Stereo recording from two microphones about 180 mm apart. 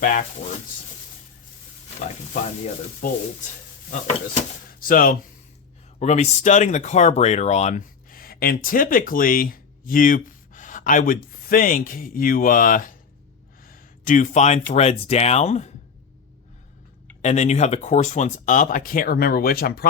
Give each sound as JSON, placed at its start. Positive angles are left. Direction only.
{"t": 0.0, "sound": "speech", "side_deg": 45}
{"t": 4.8, "sound": "speech", "side_deg": 50}
{"t": 6.0, "sound": "speech", "side_deg": 40}
{"t": 13.7, "sound": "a sound", "side_deg": 50}
{"t": 14.7, "sound": "speech", "side_deg": 35}
{"t": 17.2, "sound": "speech", "side_deg": 40}